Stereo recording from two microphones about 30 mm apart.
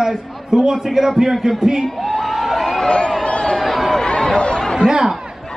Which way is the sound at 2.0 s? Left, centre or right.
Centre.